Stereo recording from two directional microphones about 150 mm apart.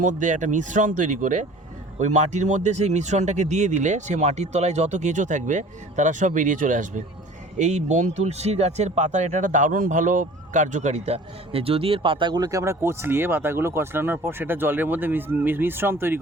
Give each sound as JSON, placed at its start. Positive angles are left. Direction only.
{"t": 0.0, "sound": "speech", "side_deg": -60}